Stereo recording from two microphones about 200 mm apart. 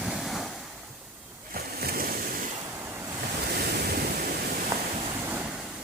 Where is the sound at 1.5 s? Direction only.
50° right (ahead or behind).